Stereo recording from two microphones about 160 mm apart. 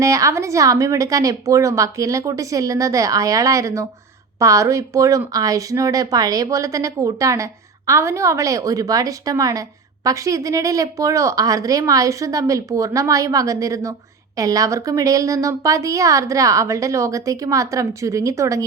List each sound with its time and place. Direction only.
0.0 s speech: 20° right (ahead or behind)